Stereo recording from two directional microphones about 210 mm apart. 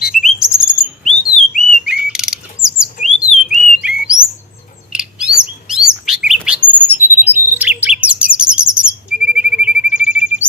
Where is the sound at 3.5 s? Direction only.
35° left (ahead or behind).